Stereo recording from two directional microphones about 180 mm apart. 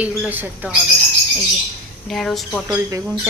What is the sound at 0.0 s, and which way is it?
Speech, 10° right (ahead or behind).